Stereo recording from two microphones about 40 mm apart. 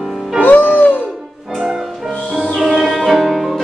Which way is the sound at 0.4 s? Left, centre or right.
Left.